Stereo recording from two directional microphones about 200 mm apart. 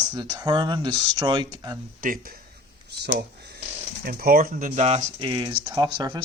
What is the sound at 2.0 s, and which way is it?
Speech, 45° right (ahead or behind).